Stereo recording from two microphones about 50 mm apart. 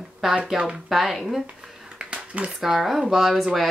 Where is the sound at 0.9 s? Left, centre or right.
Centre.